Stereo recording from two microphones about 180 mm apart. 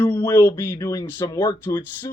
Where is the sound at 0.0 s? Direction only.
10° left (ahead or behind).